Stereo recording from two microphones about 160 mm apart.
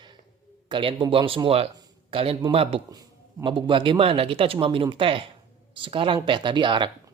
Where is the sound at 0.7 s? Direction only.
35° right (ahead or behind).